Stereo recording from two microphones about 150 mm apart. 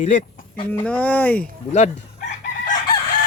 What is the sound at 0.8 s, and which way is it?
Speech, 10° left (ahead or behind).